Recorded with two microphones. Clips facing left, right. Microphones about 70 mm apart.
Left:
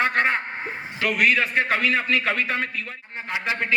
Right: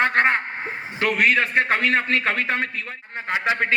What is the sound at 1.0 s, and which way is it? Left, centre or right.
A man's voice, right.